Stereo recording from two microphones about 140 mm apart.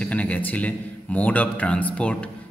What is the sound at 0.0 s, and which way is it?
A man's voice, 10° left (ahead or behind).